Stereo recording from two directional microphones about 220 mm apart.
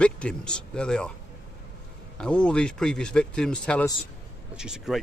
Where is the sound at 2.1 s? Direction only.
5° left (ahead or behind).